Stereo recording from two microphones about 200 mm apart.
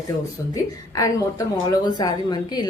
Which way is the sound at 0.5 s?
15° left (ahead or behind).